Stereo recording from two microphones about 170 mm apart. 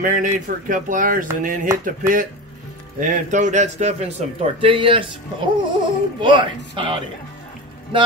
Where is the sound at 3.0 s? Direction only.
45° right (ahead or behind).